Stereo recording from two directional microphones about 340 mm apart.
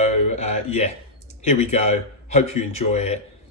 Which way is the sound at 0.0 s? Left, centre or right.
Centre.